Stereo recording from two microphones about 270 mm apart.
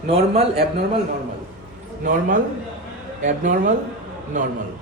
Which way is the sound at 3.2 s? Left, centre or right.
Right.